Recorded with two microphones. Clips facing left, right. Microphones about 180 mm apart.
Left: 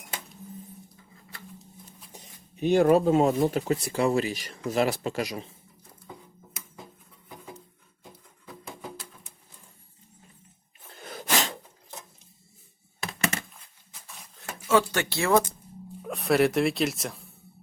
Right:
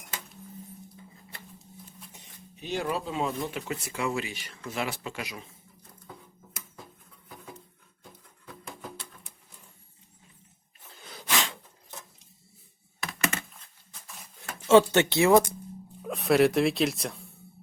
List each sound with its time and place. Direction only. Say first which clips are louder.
2.1 s speech: left 8 dB; 50° left (ahead or behind)
8.4 s music: left 2 dB; 5° left (ahead or behind)
10.9 s a sound: left 3 dB; 50° left (ahead or behind)
13.5 s a sound: even; centre (ahead or behind)
14.7 s speech: right 5 dB; 25° right (ahead or behind)
16.0 s speech: right 1 dB; centre (ahead or behind)